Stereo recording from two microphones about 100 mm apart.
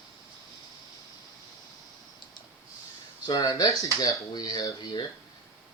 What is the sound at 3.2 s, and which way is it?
Speech, 40° left (ahead or behind).